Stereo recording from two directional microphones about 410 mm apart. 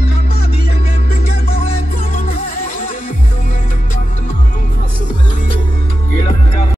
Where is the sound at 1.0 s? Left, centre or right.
Centre.